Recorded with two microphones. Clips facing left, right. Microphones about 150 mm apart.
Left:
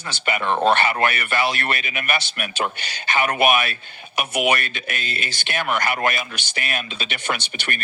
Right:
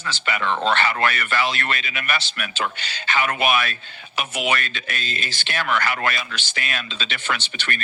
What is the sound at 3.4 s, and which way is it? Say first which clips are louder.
Speech: left 5 dB; 15° left (ahead or behind).